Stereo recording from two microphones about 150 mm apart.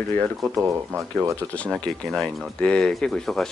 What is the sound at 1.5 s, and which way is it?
Speech, 10° left (ahead or behind).